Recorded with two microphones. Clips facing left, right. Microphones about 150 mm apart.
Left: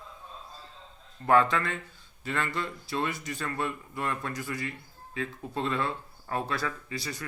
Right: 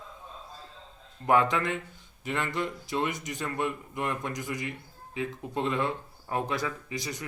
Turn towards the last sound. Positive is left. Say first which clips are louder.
# right 1 dB
turn(degrees=-20)  # may be behind; listen again after turning